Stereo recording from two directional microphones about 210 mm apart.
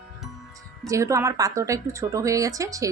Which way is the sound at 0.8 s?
15° right (ahead or behind).